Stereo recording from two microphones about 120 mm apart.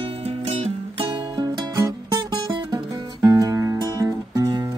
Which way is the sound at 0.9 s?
45° right (ahead or behind).